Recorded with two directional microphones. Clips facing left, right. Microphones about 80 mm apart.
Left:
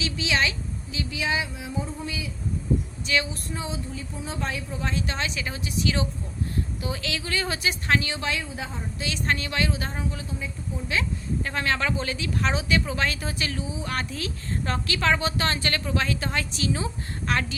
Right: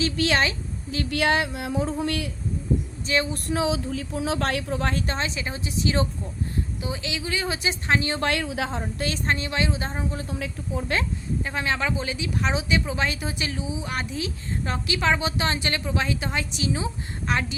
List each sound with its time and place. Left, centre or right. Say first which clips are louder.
0.0 s a woman's voice: right 3 dB; right
3.1 s a woman's voice: right 2 dB; right
3.3 s speech: right 8 dB; right
5.0 s a woman's voice: right 2 dB; right
8.1 s speech: right 5 dB; right
9.0 s a woman's voice: right 1 dB; right
9.2 s a woman's voice: left 1 dB; right
10.2 s speech: right 3 dB; right
11.4 s a woman's voice: even; centre